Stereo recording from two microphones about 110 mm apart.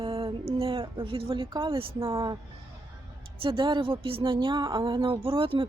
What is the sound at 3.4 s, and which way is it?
Speech, 50° right (ahead or behind).